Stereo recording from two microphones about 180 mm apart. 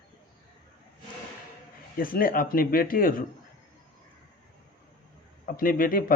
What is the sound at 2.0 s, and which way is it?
Speech, 50° left (ahead or behind).